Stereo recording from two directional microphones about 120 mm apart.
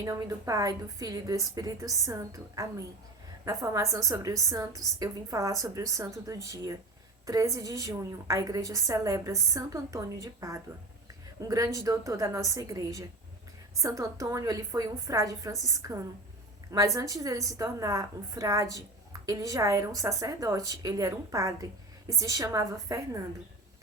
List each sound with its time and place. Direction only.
0.0 s a woman's voice: 30° right (ahead or behind)